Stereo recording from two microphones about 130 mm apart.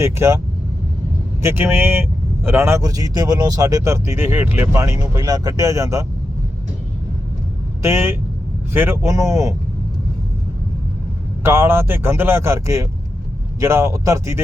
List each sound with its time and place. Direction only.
0.0 s speech: 20° right (ahead or behind)
1.4 s speech: 20° right (ahead or behind)
7.8 s speech: 20° right (ahead or behind)
11.4 s speech: 20° right (ahead or behind)